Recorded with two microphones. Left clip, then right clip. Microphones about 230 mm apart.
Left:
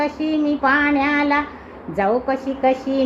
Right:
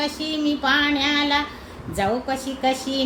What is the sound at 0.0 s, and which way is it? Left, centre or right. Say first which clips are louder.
Speech: left 4 dB; right.